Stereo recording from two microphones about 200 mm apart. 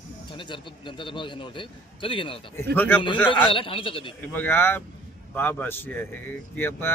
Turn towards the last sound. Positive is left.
turn(degrees=10)  # may be behind; listen again after turning